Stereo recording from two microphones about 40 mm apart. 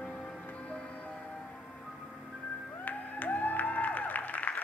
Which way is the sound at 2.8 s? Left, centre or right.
Left.